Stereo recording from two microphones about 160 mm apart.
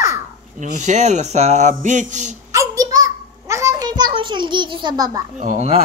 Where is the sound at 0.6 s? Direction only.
50° right (ahead or behind).